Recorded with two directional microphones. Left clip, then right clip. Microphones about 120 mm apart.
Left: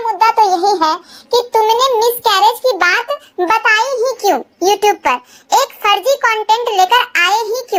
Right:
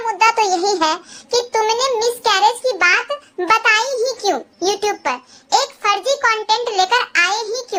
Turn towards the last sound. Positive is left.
turn(degrees=35)  # may be behind; listen again after turning